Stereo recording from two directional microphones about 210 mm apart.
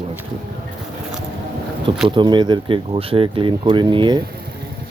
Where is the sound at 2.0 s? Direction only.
25° right (ahead or behind).